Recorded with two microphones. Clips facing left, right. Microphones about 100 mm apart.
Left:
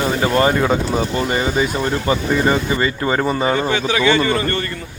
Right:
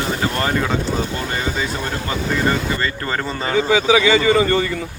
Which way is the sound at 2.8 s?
15° left (ahead or behind).